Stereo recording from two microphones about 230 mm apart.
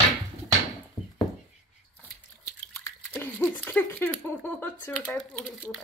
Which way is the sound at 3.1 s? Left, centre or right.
Centre.